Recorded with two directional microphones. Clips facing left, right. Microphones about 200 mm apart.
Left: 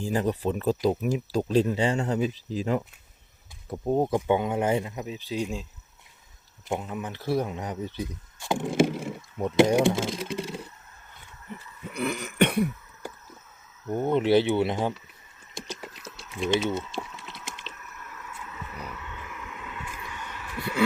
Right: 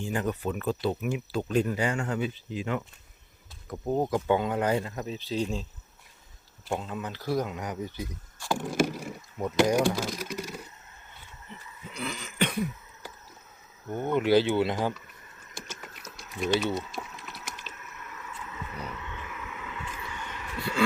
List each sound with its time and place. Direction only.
0.0 s speech: 35° left (ahead or behind)
3.7 s speech: 25° left (ahead or behind)
6.7 s speech: 15° left (ahead or behind)
11.9 s cough: 60° left (ahead or behind)
13.8 s speech: 35° left (ahead or behind)
15.6 s typing: 35° left (ahead or behind)
16.6 s a sound: 25° left (ahead or behind)
18.0 s vehicle: 5° right (ahead or behind)
19.8 s a sound: 10° left (ahead or behind)